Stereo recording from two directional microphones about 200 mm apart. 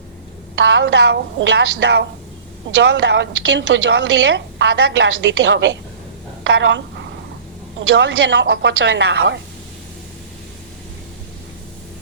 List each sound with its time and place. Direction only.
0.5 s a woman's voice: 65° right (ahead or behind)
6.4 s a sound: 65° right (ahead or behind)
7.8 s a woman's voice: 65° right (ahead or behind)